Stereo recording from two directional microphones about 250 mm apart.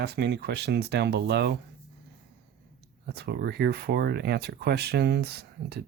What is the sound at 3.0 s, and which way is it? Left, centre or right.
Speech, right.